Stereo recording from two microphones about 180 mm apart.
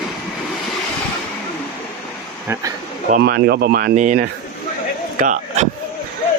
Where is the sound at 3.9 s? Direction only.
45° right (ahead or behind).